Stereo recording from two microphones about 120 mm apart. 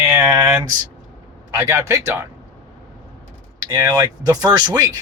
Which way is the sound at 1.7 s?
25° right (ahead or behind).